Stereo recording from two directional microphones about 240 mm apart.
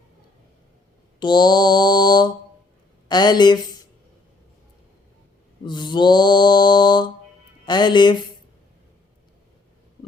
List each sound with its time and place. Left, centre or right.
1.2 s mantra: centre
5.6 s mantra: centre